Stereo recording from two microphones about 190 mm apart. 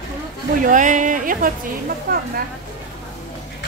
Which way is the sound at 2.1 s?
50° right (ahead or behind).